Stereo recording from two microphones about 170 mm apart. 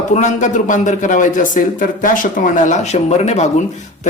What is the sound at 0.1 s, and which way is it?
Speech, 45° left (ahead or behind).